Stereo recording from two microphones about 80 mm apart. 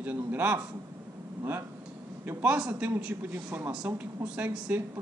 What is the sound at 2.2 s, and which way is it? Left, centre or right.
A man's voice, right.